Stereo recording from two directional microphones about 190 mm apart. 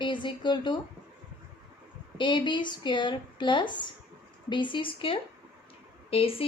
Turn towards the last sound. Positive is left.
turn(degrees=30)  # may be behind; listen again after turning